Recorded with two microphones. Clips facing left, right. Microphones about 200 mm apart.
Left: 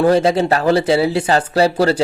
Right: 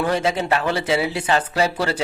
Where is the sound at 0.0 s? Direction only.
35° left (ahead or behind).